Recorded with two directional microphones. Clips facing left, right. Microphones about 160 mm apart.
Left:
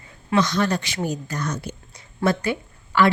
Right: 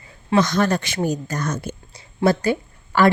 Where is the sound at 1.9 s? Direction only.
35° right (ahead or behind).